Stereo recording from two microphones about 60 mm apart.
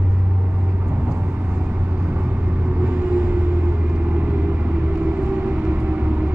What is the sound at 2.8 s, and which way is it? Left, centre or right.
Vehicle, right.